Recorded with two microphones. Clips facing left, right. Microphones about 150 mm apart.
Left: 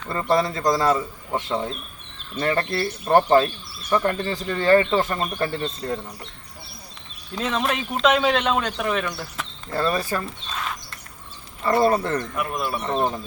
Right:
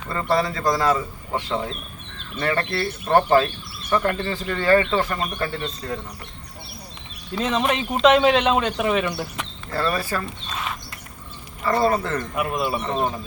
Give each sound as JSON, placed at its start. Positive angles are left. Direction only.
{"t": 0.1, "sound": "a man's voice", "side_deg": 20}
{"t": 7.3, "sound": "speech", "side_deg": -5}
{"t": 9.7, "sound": "speech", "side_deg": 20}
{"t": 10.2, "sound": "speech", "side_deg": -5}
{"t": 11.6, "sound": "a man's voice", "side_deg": 20}
{"t": 12.4, "sound": "speech", "side_deg": -5}